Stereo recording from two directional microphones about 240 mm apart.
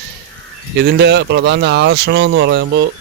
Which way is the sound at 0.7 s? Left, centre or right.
Right.